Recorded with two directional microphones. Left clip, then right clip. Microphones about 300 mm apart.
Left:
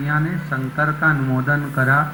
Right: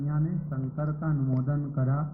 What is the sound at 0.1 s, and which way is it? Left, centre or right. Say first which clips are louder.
Speech: left 14 dB; centre.